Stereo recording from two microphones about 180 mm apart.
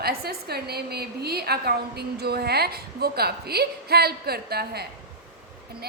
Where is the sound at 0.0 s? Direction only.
60° right (ahead or behind).